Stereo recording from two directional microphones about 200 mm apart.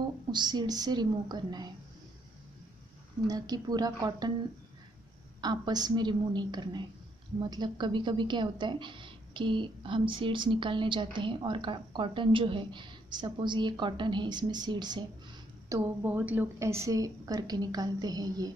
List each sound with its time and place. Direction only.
0.3 s a woman's voice: 20° right (ahead or behind)
3.3 s a woman's voice: 20° right (ahead or behind)
5.4 s a woman's voice: 20° right (ahead or behind)
15.7 s a woman's voice: 10° right (ahead or behind)